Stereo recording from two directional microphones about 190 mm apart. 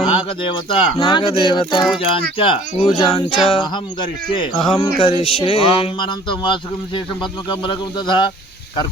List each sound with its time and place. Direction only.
0.0 s speech: 25° left (ahead or behind)